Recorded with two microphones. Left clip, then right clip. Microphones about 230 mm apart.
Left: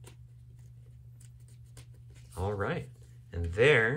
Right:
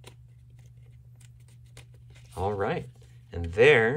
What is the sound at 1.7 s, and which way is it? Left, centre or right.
Shuffling cards, right.